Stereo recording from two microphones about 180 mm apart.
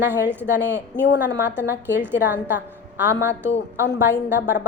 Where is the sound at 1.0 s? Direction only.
80° left.